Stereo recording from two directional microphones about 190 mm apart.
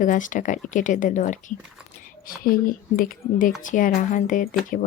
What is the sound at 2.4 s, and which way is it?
Speech, 50° left (ahead or behind).